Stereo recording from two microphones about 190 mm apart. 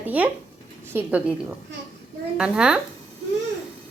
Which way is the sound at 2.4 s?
5° right (ahead or behind).